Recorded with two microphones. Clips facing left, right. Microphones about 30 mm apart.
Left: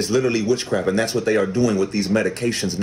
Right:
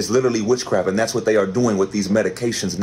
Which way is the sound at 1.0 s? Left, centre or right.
Left.